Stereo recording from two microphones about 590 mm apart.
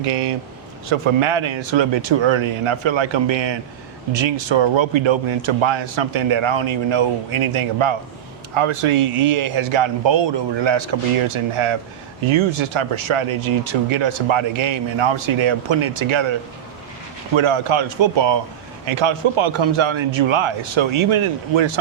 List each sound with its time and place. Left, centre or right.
0.9 s a man's voice: right
17.3 s a man's voice: right